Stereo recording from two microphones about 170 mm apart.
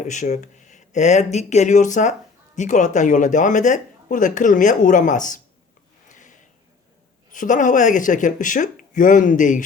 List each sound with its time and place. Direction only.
0.0 s speech: 45° left (ahead or behind)
6.1 s a sound: 45° left (ahead or behind)
7.3 s speech: 50° left (ahead or behind)